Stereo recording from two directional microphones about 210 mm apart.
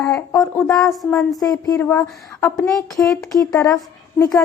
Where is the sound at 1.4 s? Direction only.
15° left (ahead or behind).